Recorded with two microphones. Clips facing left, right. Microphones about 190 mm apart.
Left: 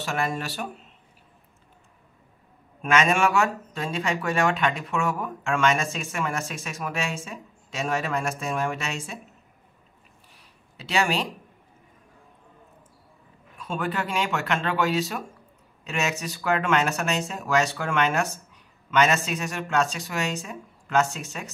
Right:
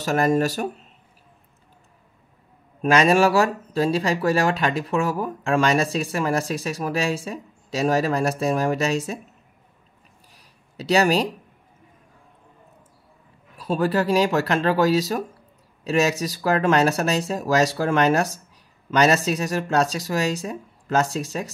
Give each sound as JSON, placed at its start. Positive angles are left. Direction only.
{"t": 0.0, "sound": "speech", "side_deg": -40}
{"t": 2.8, "sound": "speech", "side_deg": -35}
{"t": 10.3, "sound": "a sound", "side_deg": -40}
{"t": 13.6, "sound": "speech", "side_deg": -35}